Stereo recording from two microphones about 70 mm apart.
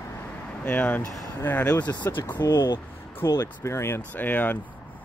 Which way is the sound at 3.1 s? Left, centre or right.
Left.